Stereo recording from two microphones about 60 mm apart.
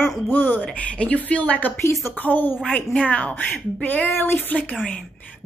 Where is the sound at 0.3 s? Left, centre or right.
Left.